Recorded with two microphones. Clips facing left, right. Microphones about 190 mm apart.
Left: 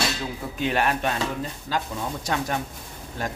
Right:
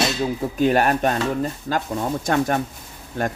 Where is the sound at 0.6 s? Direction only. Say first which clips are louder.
Right 6 dB; 45° right (ahead or behind).